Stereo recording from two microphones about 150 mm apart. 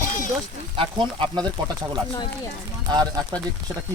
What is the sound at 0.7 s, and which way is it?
Speech, 30° right (ahead or behind).